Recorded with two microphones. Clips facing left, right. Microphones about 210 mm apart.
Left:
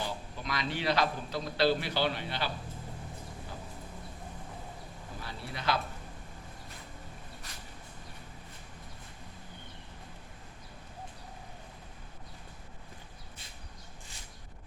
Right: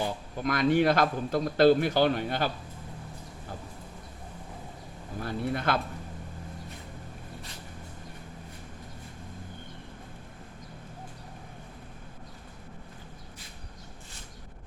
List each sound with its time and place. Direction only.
0.0 s a man's voice: 50° right (ahead or behind)
5.2 s speech: 50° right (ahead or behind)